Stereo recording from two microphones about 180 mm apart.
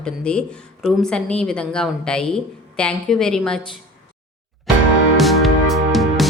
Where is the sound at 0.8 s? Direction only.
5° left (ahead or behind).